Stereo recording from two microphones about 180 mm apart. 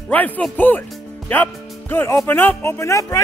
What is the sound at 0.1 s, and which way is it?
Speech, 10° left (ahead or behind).